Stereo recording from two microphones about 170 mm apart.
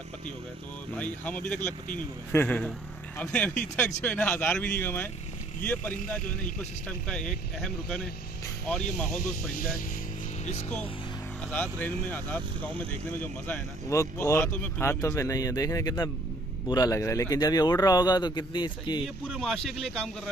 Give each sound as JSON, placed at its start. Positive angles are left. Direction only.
{"t": 0.9, "sound": "speech", "side_deg": 10}
{"t": 6.2, "sound": "speech", "side_deg": 50}
{"t": 7.1, "sound": "speech", "side_deg": 5}
{"t": 9.2, "sound": "speech", "side_deg": 55}
{"t": 11.5, "sound": "a man's voice", "side_deg": 10}
{"t": 19.0, "sound": "speech", "side_deg": 0}